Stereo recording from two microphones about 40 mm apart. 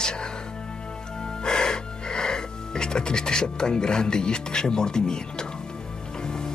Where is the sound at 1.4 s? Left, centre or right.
Centre.